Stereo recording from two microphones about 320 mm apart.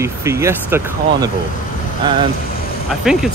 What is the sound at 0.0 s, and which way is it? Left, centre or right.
Speech, centre.